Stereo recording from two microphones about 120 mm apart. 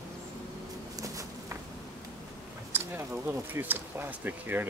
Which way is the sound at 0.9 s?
30° right (ahead or behind).